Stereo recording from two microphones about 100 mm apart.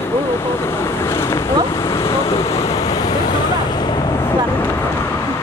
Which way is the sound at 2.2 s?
70° left (ahead or behind).